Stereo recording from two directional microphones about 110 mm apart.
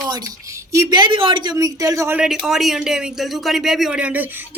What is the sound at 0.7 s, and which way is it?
Speech, 35° right (ahead or behind).